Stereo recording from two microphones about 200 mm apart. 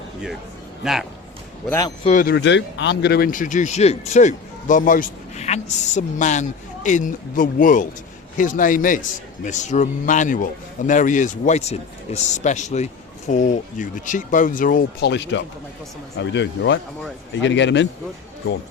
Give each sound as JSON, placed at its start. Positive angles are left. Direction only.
{"t": 2.0, "sound": "speech", "side_deg": 40}
{"t": 2.3, "sound": "speech", "side_deg": 60}
{"t": 15.1, "sound": "speech", "side_deg": 60}